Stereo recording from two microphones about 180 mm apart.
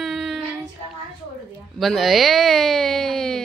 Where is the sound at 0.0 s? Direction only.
Centre (ahead or behind).